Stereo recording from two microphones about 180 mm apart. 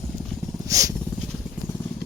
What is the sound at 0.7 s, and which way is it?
Vehicle, 20° right (ahead or behind).